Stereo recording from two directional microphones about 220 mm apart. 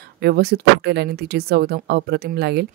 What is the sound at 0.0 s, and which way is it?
Speech, 45° right (ahead or behind).